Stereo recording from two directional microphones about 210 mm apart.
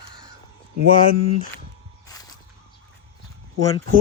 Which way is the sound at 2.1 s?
15° left (ahead or behind).